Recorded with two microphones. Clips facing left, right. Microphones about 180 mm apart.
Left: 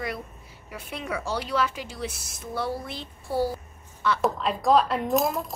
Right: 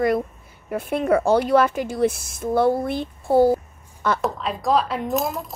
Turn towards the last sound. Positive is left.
turn(degrees=0)  # may be behind; listen again after turning